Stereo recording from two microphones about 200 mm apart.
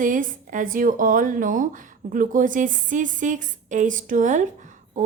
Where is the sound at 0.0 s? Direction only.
40° right (ahead or behind).